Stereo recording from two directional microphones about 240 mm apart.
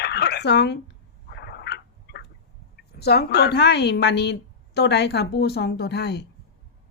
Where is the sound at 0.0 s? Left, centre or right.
Left.